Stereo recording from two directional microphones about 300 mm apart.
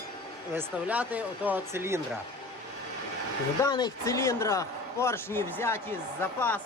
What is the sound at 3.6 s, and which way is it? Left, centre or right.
Speech, centre.